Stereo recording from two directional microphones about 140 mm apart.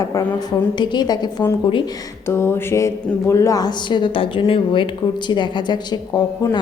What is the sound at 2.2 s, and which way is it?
A woman's voice, 20° left (ahead or behind).